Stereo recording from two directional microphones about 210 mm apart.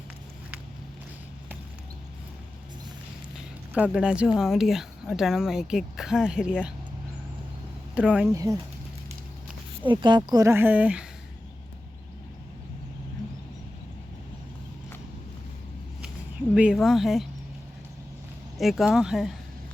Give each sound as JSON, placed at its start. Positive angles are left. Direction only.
{"t": 3.3, "sound": "speech", "side_deg": -5}
{"t": 8.1, "sound": "speech", "side_deg": -10}
{"t": 9.8, "sound": "speech", "side_deg": -20}
{"t": 16.6, "sound": "speech", "side_deg": 0}
{"t": 18.5, "sound": "speech", "side_deg": 0}